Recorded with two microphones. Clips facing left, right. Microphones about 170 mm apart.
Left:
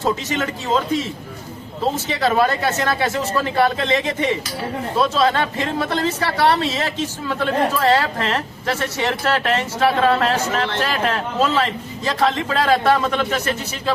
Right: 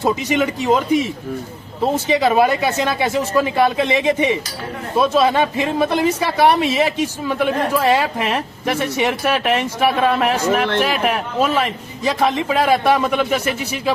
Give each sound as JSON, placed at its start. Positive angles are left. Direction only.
{"t": 0.0, "sound": "a man's voice", "side_deg": -15}
{"t": 2.0, "sound": "a man's voice", "side_deg": -15}